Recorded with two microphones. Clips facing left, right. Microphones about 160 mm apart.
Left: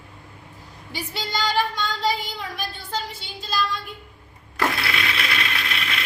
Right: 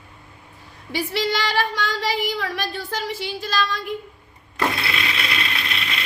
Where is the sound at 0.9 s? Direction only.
90° right.